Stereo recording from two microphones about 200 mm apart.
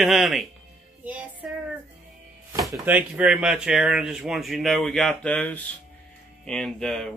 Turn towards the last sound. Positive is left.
turn(degrees=5)  # may be behind; listen again after turning